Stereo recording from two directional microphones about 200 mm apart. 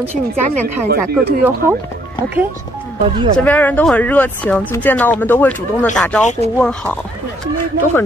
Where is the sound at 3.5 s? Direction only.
10° left (ahead or behind).